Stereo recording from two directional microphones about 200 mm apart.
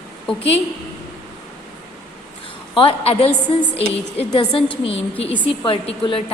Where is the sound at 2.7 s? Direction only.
25° left (ahead or behind).